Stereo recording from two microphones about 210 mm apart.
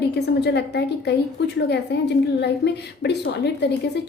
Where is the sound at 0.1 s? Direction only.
55° left (ahead or behind).